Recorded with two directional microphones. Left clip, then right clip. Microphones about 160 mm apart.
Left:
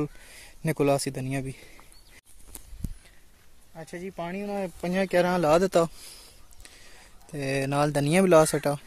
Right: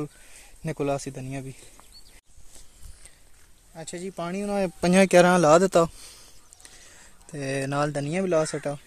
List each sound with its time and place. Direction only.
0.0 s speech: 25° left (ahead or behind)
3.7 s speech: 5° right (ahead or behind)
4.2 s speech: 40° right (ahead or behind)
4.5 s speech: 75° right (ahead or behind)
5.4 s speech: 20° right (ahead or behind)
7.2 s speech: 10° left (ahead or behind)
7.9 s speech: 30° left (ahead or behind)